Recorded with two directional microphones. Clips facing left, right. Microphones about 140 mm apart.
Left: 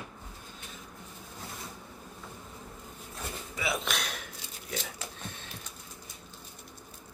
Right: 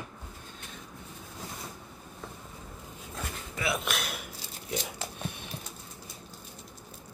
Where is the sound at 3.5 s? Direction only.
Centre (ahead or behind).